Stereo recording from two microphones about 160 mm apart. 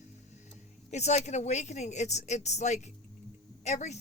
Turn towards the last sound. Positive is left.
turn(degrees=45)  # may be behind; listen again after turning